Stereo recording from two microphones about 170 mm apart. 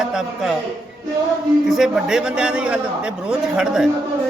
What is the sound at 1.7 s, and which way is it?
Speech, centre (ahead or behind).